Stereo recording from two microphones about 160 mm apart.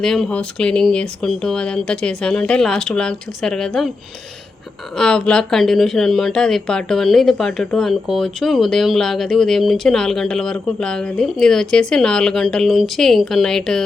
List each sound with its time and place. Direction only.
0.0 s speech: 5° left (ahead or behind)
4.9 s speech: 5° left (ahead or behind)